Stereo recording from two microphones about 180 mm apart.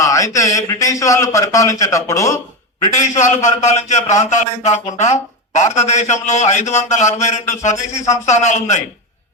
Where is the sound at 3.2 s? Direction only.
40° left (ahead or behind).